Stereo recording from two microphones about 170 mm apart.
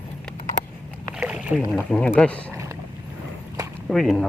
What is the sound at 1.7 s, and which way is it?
Speech, 5° left (ahead or behind).